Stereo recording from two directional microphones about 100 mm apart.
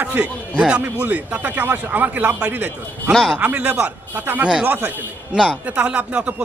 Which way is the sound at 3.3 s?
15° right (ahead or behind).